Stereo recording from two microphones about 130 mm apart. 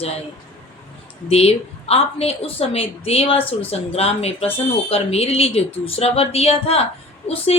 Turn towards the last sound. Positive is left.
turn(degrees=50)  # may be behind; listen again after turning